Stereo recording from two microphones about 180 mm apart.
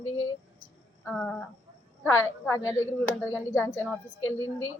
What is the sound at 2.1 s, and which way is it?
Speech, 15° left (ahead or behind).